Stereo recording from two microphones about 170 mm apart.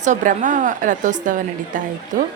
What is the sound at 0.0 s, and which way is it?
A woman's voice, 45° right (ahead or behind).